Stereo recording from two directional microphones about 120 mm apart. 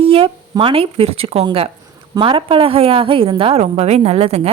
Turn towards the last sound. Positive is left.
turn(degrees=-60)  # may be behind; listen again after turning